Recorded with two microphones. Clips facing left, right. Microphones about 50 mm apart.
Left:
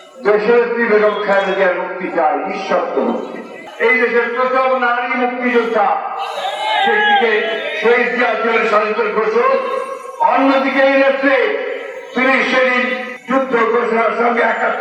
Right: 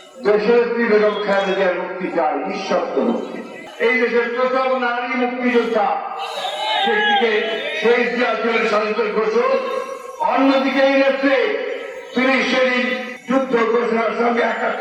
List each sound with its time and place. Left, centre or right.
0.3 s a man's voice: centre
3.8 s a man's voice: centre
5.4 s a man's voice: centre; by 14.8 s left